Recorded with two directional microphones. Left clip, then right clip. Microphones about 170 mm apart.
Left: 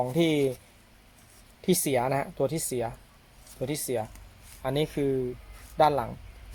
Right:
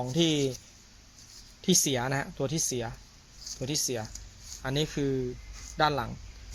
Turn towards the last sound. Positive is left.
turn(degrees=10)  # may be behind; listen again after turning